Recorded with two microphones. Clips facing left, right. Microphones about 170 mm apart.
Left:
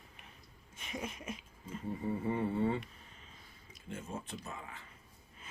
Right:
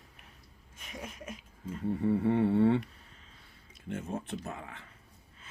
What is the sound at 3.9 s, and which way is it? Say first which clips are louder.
Speech: right 6 dB; 65° right (ahead or behind).